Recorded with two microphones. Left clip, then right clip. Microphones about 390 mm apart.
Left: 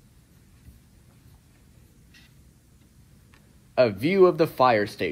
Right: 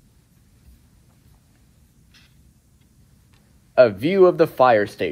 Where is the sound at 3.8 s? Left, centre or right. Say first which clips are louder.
Right 5 dB; centre.